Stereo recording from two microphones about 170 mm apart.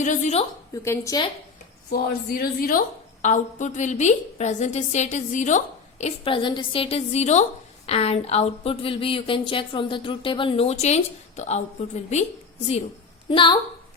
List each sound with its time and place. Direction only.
0.0 s a woman's voice: 45° left (ahead or behind)
0.7 s a woman's voice: 15° left (ahead or behind)
1.9 s a woman's voice: 60° left (ahead or behind); by 12.2 s 40° left (ahead or behind)
13.3 s a woman's voice: 30° left (ahead or behind)